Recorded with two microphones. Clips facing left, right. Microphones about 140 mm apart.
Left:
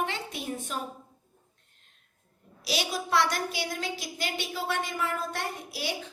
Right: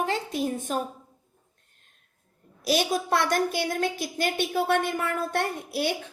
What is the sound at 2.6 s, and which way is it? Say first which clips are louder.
A woman's voice: right 7 dB; 50° right (ahead or behind).